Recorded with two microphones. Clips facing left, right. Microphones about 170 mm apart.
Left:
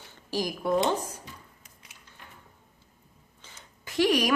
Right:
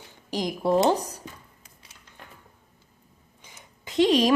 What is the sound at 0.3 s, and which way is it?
Speech, 20° right (ahead or behind).